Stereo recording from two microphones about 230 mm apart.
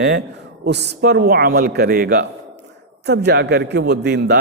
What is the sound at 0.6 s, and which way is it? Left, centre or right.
A man's voice, right.